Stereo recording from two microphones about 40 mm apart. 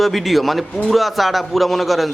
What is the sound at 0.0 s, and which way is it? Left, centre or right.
A man's voice, centre.